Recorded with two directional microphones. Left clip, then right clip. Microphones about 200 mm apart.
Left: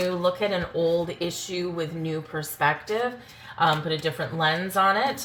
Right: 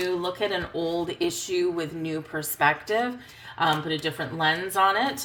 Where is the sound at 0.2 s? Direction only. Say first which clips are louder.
Left 3 dB; 50° right (ahead or behind).